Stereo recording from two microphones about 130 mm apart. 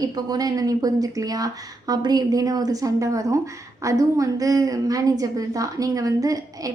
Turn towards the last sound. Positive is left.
turn(degrees=-25)  # may be behind; listen again after turning